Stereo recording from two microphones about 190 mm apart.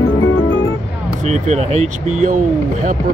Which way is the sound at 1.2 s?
35° right (ahead or behind).